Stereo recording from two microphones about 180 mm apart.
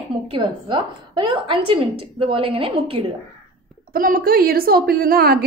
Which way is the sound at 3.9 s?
50° right (ahead or behind).